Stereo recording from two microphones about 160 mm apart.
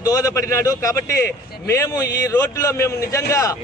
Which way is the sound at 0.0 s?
20° left (ahead or behind).